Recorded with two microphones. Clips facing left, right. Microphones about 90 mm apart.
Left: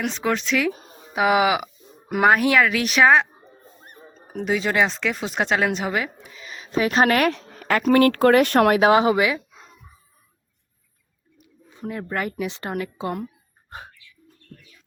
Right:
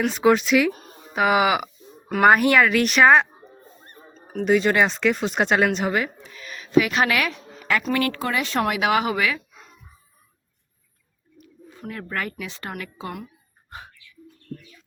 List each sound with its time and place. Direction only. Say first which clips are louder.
0.0 s speech: right 6 dB; 10° right (ahead or behind)
3.8 s a sound: left 1 dB; 15° left (ahead or behind)
4.4 s speech: right 3 dB; centre (ahead or behind)
6.3 s a sound: right 1 dB; 20° left (ahead or behind)
6.6 s speech: even; 35° left (ahead or behind); by 8.8 s 55° left (ahead or behind)
8.8 s speech: left 5 dB; 30° left (ahead or behind)
11.4 s speech: left 3 dB; 20° left (ahead or behind)
13.7 s dog: left 1 dB; 35° left (ahead or behind)